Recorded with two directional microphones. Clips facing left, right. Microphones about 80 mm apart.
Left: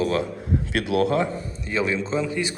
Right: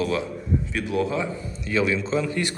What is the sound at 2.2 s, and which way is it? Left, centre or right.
Speech, centre.